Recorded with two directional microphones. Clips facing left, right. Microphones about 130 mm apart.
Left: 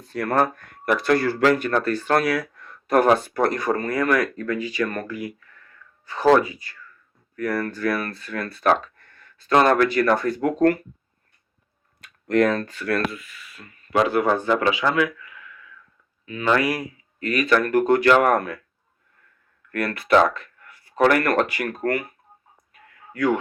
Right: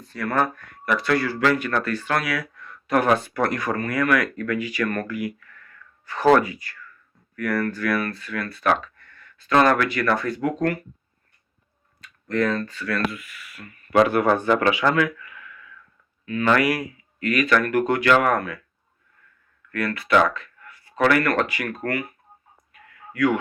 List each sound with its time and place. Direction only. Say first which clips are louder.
0.1 s speech: left 2 dB; 45° left (ahead or behind)
11.9 s speech: left 4 dB; 60° left (ahead or behind)
13.1 s a man's voice: right 1 dB; 25° left (ahead or behind); by 18.6 s 45° left (ahead or behind)
19.7 s speech: left 2 dB; 50° left (ahead or behind)
23.1 s speech: even; 35° left (ahead or behind)